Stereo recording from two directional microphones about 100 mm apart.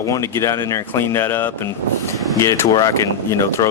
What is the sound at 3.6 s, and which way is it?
Speech, 45° left (ahead or behind).